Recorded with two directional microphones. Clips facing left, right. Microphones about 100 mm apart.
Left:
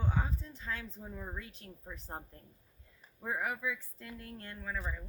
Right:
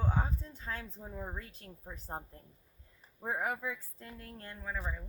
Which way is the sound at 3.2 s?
35° right (ahead or behind).